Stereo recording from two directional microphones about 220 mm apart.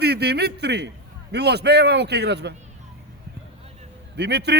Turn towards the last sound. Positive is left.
turn(degrees=-50)  # may be behind; listen again after turning